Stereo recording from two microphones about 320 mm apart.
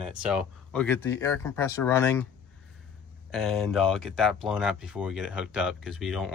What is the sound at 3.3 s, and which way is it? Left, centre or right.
Speech, centre.